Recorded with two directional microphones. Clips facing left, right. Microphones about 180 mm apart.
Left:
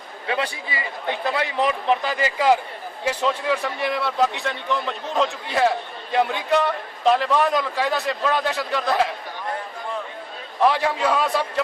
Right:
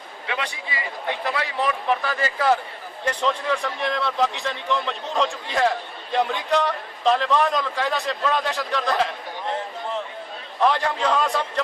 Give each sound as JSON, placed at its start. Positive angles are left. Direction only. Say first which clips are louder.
{"t": 0.3, "sound": "a man's voice", "louder": "left 4 dB", "side_deg": 30}
{"t": 10.6, "sound": "a man's voice", "louder": "left 2 dB", "side_deg": 5}